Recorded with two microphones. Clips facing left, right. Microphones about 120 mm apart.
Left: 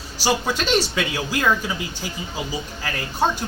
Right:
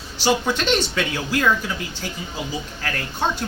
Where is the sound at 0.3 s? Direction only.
10° left (ahead or behind).